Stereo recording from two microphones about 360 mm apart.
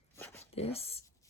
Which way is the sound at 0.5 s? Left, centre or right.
Centre.